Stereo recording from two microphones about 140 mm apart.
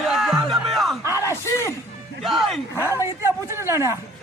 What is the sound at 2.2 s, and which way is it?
Speech, centre (ahead or behind).